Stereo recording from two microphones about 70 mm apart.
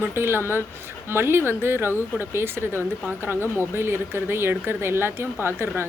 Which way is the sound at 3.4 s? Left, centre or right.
Left.